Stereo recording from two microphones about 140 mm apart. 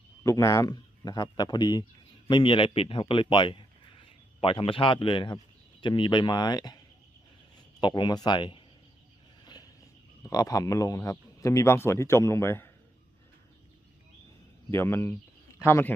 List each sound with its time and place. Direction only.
0.2 s a man's voice: 25° left (ahead or behind)
10.2 s speech: 25° left (ahead or behind)
14.7 s a man's voice: 15° left (ahead or behind)